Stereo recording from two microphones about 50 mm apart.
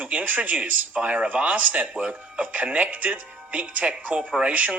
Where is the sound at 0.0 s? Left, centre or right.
Right.